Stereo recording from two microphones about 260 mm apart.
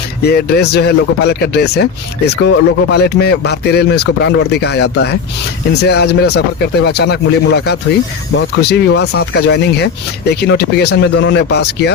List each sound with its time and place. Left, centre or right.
0.2 s speech: left